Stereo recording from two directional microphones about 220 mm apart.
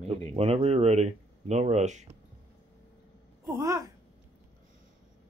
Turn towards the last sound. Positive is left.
turn(degrees=-15)  # may be behind; listen again after turning